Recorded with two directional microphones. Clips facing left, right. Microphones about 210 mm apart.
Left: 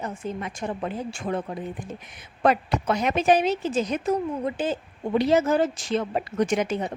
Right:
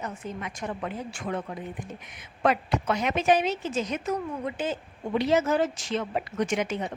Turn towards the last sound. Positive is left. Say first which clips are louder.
# left 4 dB
turn(degrees=35)  # may be behind; listen again after turning